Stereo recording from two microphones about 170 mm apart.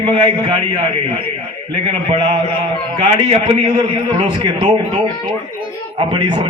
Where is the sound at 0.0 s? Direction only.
30° right (ahead or behind).